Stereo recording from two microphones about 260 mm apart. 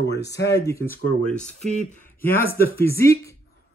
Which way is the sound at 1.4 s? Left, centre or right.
Left.